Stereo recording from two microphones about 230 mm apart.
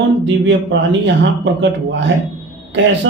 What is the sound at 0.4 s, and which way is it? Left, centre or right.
Speech, right.